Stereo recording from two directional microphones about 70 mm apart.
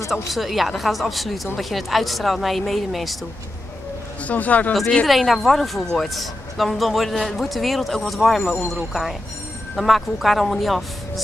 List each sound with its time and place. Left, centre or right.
0.3 s a woman's voice: centre
4.2 s speech: left
5.0 s a woman's voice: centre
9.8 s a woman's voice: centre